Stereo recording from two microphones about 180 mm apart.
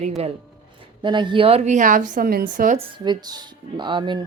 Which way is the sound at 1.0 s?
25° right (ahead or behind).